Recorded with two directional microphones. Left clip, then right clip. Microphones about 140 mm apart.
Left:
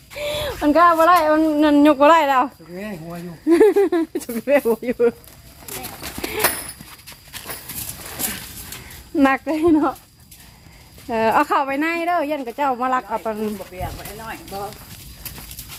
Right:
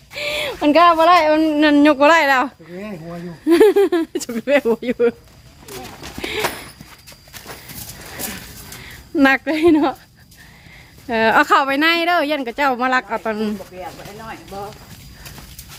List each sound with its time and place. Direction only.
0.1 s a sound: 5° right (ahead or behind)
0.7 s a woman's voice: 20° right (ahead or behind)
6.4 s a sound: 25° left (ahead or behind)
9.1 s a woman's voice: 10° right (ahead or behind)
9.6 s speech: 30° right (ahead or behind)
11.1 s a woman's voice: 20° right (ahead or behind)